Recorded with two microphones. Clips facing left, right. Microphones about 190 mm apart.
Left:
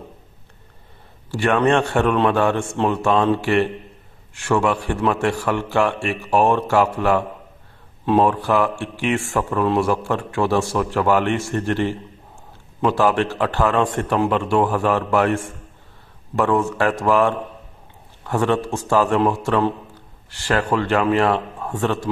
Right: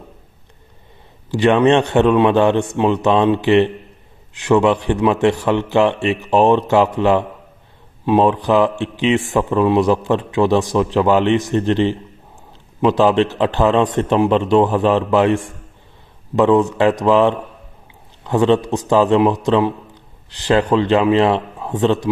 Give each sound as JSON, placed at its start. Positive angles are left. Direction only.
{"t": 1.3, "sound": "speech", "side_deg": -20}